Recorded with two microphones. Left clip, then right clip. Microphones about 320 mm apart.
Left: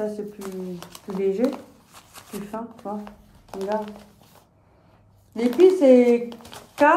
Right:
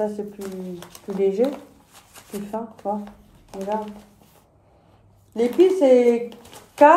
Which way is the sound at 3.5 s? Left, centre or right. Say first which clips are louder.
Even; centre.